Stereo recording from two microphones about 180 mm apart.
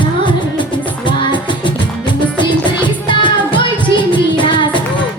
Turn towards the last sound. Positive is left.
turn(degrees=25)  # may be behind; listen again after turning